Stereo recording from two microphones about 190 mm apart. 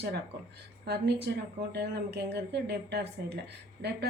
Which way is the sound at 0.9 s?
60° right (ahead or behind).